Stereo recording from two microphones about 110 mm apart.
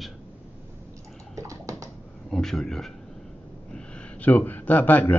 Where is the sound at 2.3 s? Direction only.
5° left (ahead or behind).